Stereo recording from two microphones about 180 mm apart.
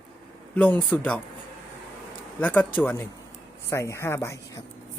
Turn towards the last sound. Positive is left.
turn(degrees=15)  # may be behind; listen again after turning